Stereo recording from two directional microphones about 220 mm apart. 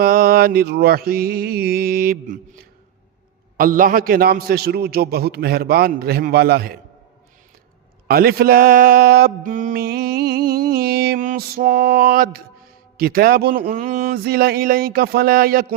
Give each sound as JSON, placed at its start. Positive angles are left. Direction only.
{"t": 0.0, "sound": "mantra", "side_deg": -40}
{"t": 3.6, "sound": "mantra", "side_deg": -40}
{"t": 8.0, "sound": "mantra", "side_deg": -45}